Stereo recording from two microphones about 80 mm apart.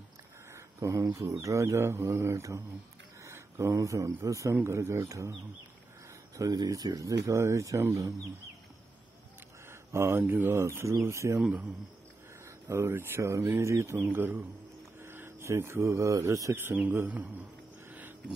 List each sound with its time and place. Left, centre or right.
0.5 s speech: right
6.3 s speech: right
7.3 s speech: right
9.7 s speech: right
11.3 s a man's voice: centre
12.4 s a man's voice: right
16.9 s a sound: right